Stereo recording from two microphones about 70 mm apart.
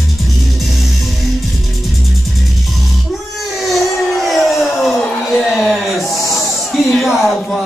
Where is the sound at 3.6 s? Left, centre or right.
Centre.